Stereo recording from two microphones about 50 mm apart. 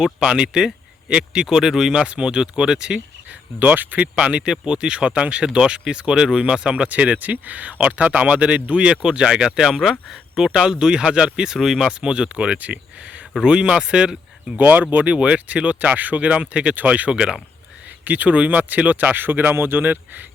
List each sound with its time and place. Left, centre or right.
0.0 s speech: centre
2.0 s speech: right
3.6 s speech: right
4.1 s speech: centre
11.9 s speech: centre
14.6 s speech: right; by 17.3 s centre
18.0 s speech: right